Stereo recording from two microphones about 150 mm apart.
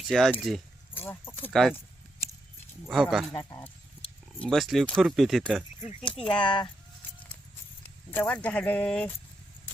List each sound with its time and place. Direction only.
0.1 s speech: centre (ahead or behind)
0.9 s speech: 15° left (ahead or behind)
2.8 s speech: centre (ahead or behind)
3.3 s speech: 20° left (ahead or behind)
4.4 s speech: centre (ahead or behind)
6.1 s speech: 35° left (ahead or behind)
8.1 s speech: 10° left (ahead or behind)